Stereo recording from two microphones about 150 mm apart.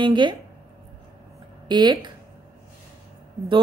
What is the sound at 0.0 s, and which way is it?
Speech, 30° right (ahead or behind).